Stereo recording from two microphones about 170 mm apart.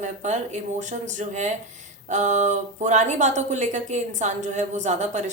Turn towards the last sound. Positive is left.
turn(degrees=-45)  # may be behind; listen again after turning